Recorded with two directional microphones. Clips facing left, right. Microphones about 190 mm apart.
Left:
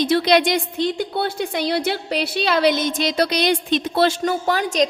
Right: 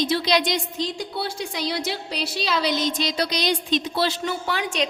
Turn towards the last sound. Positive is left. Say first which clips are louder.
# left 6 dB
turn(degrees=40)  # may be behind; listen again after turning